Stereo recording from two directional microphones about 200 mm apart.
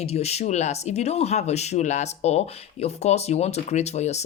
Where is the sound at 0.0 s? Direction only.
30° left (ahead or behind).